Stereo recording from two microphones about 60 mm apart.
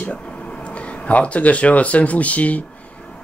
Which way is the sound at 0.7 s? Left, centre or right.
Left.